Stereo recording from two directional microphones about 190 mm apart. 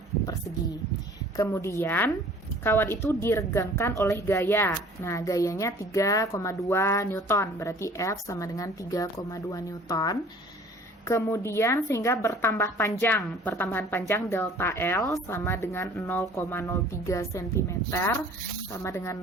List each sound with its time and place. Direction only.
1.4 s a woman's voice: 15° left (ahead or behind)